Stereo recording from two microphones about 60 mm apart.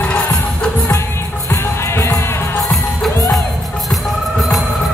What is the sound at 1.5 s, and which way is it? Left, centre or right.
Music, left.